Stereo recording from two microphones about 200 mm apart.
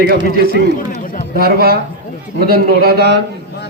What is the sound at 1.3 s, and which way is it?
A man's voice, 50° right (ahead or behind).